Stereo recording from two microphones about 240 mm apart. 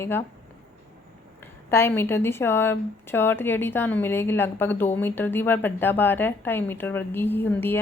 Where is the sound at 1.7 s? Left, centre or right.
Centre.